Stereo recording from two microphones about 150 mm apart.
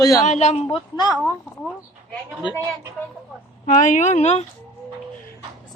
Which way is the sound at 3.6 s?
60° left (ahead or behind).